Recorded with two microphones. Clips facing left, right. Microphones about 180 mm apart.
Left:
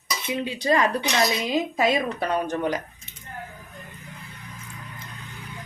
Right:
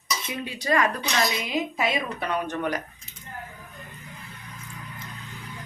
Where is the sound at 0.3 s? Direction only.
25° left (ahead or behind).